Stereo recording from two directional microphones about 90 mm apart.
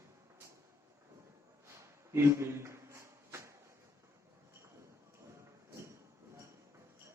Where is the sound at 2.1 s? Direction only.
30° right (ahead or behind).